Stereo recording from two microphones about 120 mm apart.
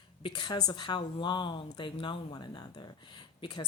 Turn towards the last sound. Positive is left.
turn(degrees=40)  # may be behind; listen again after turning